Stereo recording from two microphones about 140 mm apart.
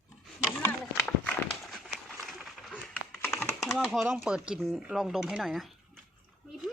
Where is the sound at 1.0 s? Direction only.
Centre (ahead or behind).